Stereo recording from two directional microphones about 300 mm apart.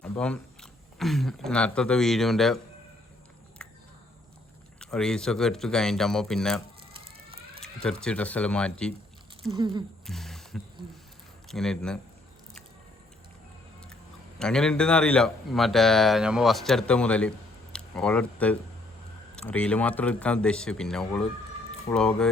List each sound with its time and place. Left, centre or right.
0.0 s speech: centre
4.8 s speech: centre
7.6 s speech: centre
9.6 s speech: centre
10.1 s a sound: centre
11.4 s speech: centre
13.9 s speech: centre